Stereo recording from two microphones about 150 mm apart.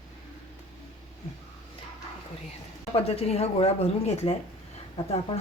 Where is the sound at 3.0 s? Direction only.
40° left (ahead or behind).